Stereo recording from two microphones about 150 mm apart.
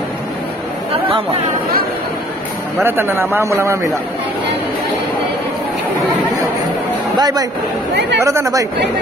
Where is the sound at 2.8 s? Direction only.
15° right (ahead or behind).